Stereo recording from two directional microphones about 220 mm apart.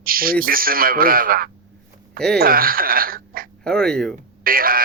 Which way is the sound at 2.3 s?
40° right (ahead or behind).